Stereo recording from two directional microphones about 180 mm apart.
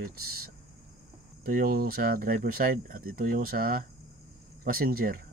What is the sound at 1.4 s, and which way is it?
Speech, 55° right (ahead or behind).